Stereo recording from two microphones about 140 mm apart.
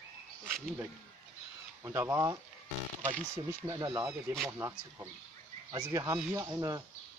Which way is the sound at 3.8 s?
30° right (ahead or behind).